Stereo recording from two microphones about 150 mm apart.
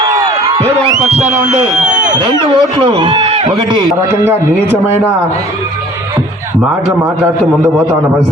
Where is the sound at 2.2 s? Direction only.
30° right (ahead or behind).